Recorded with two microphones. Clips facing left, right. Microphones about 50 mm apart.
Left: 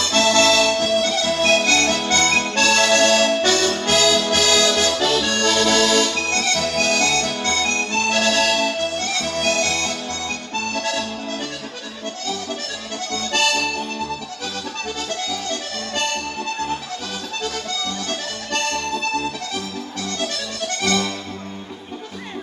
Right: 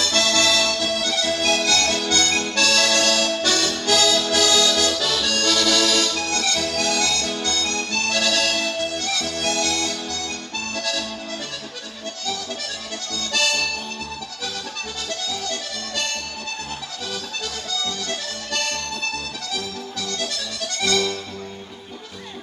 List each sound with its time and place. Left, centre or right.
0.0 s accordion: left
13.1 s accordion: left
17.4 s accordion: left
20.0 s accordion: left